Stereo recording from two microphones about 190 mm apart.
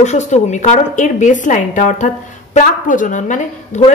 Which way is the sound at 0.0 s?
35° left (ahead or behind).